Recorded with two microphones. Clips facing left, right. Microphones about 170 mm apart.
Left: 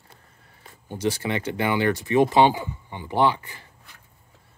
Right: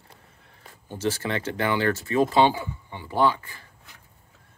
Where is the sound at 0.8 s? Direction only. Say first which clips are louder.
Left 2 dB; 15° left (ahead or behind).